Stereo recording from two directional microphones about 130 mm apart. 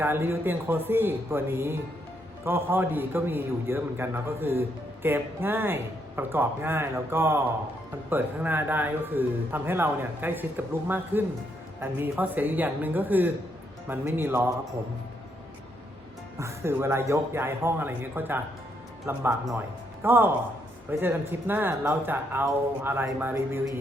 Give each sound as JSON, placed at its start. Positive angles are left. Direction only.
{"t": 0.0, "sound": "speech", "side_deg": -20}
{"t": 16.4, "sound": "speech", "side_deg": -20}